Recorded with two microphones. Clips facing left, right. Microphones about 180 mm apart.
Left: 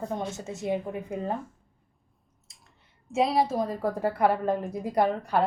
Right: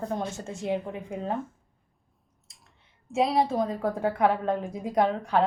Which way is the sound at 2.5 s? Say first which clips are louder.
Left 1 dB; centre (ahead or behind).